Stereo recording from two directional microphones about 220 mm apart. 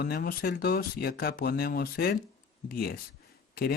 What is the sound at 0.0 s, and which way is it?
Speech, 45° left (ahead or behind).